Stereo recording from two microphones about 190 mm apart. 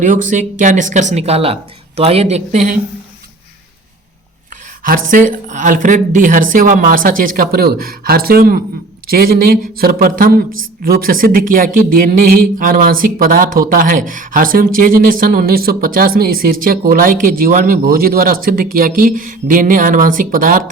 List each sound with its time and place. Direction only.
0.0 s speech: 40° right (ahead or behind)
4.8 s speech: 45° right (ahead or behind)